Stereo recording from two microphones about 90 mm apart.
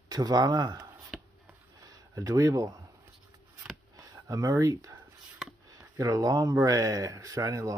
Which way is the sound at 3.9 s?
40° right (ahead or behind).